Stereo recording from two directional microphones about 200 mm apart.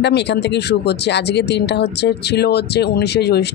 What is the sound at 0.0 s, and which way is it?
Speech, 60° left (ahead or behind).